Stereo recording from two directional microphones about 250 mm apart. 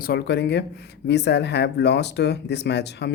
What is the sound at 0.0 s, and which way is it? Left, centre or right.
Speech, left.